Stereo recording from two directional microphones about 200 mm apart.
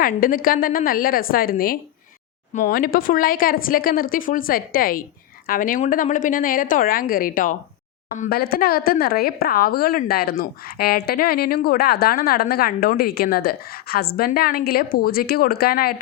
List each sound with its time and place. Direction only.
0.0 s speech: 45° left (ahead or behind)